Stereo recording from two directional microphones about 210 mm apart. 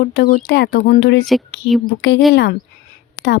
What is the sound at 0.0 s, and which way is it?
Speech, 45° left (ahead or behind).